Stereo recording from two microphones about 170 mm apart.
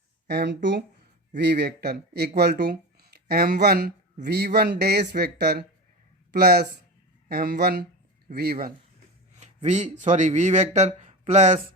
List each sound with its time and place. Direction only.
0.3 s speech: 85° right; by 8.7 s 60° right (ahead or behind)
9.3 s speech: 40° right (ahead or behind)